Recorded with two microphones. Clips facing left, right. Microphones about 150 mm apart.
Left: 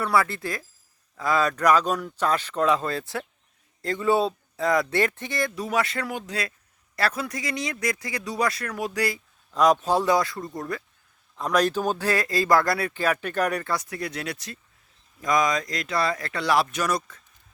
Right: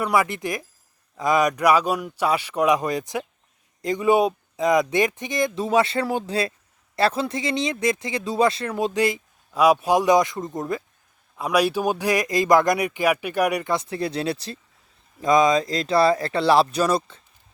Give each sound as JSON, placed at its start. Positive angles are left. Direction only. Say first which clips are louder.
{"t": 0.0, "sound": "speech", "louder": "right 2 dB", "side_deg": -15}
{"t": 9.5, "sound": "speech", "louder": "right 3 dB", "side_deg": -10}
{"t": 11.3, "sound": "speech", "louder": "right 2 dB", "side_deg": -10}
{"t": 13.7, "sound": "speech", "louder": "right 5 dB", "side_deg": -30}